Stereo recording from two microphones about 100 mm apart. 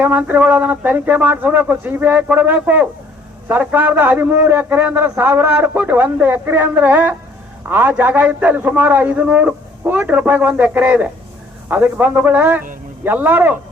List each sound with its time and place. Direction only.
0.0 s a man's voice: 15° right (ahead or behind)